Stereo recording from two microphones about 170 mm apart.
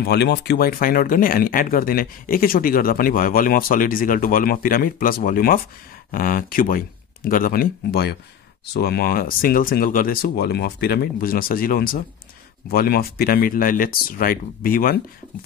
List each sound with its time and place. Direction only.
0.0 s speech: 75° left (ahead or behind); by 15.0 s 55° left (ahead or behind)